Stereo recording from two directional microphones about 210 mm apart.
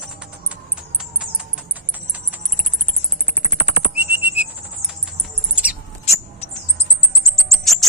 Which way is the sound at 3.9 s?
10° right (ahead or behind).